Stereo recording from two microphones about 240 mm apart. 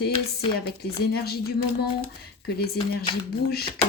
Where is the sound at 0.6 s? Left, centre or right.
Left.